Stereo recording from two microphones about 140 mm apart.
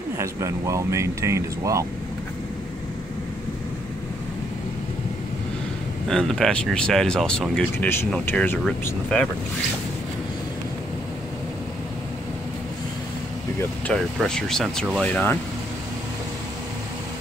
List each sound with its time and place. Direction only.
0.2 s speech: 20° right (ahead or behind)
6.0 s speech: 5° left (ahead or behind)
14.1 s speech: 5° left (ahead or behind)